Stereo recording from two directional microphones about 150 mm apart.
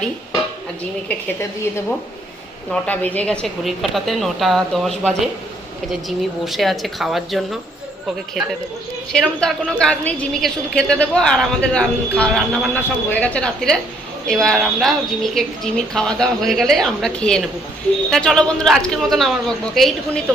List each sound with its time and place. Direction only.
1.0 s a woman's voice: 20° left (ahead or behind); by 20.2 s centre (ahead or behind)